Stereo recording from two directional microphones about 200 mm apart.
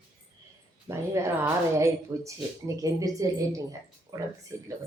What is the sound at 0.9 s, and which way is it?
Speech, 15° right (ahead or behind).